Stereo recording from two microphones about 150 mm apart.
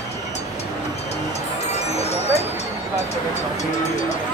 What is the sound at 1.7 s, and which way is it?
Music, 45° left (ahead or behind).